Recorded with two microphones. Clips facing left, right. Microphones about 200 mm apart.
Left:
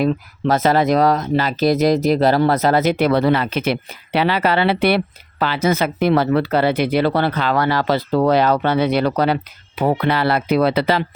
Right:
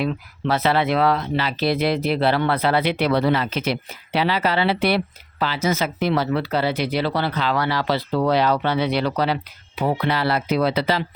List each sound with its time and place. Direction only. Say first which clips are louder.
0.0 s speech: left 6 dB; 45° left (ahead or behind)